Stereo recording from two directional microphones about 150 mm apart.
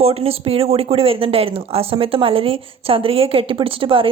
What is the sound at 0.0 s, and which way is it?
Speech, 40° right (ahead or behind).